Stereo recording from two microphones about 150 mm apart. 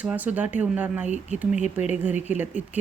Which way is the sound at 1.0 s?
50° right (ahead or behind).